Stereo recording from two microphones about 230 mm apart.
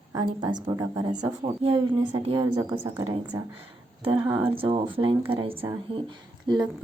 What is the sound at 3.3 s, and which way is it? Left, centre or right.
Speech, centre.